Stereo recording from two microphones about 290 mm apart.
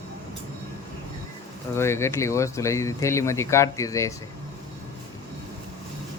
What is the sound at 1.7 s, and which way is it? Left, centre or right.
Speech, centre.